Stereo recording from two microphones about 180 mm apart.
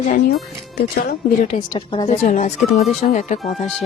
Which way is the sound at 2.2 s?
45° left (ahead or behind).